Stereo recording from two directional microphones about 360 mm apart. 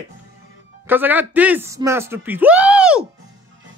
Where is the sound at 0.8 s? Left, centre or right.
Centre.